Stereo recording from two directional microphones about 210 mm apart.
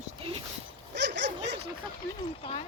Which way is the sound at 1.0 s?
55° right (ahead or behind).